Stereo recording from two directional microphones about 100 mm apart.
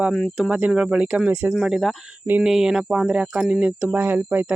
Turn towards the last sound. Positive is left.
turn(degrees=-20)  # may be behind; listen again after turning